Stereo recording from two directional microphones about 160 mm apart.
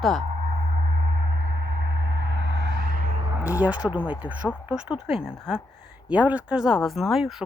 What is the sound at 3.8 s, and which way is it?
Speech, 10° right (ahead or behind).